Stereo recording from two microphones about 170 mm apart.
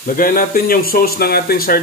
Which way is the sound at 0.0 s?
55° left (ahead or behind).